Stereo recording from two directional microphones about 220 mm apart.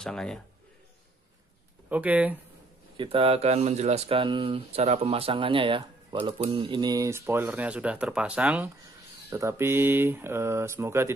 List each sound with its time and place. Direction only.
0.0 s a man's voice: 5° left (ahead or behind)
1.9 s speech: 5° right (ahead or behind)
3.0 s speech: 25° right (ahead or behind)